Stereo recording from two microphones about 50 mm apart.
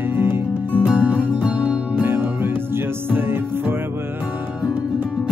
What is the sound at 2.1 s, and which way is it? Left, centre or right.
Music, right.